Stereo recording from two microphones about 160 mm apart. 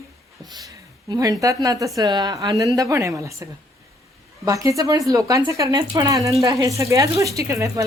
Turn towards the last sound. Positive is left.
turn(degrees=-20)  # may be behind; listen again after turning